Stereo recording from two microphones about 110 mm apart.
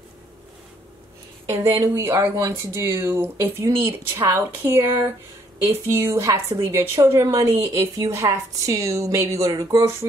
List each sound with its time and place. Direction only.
1.5 s speech: 30° right (ahead or behind)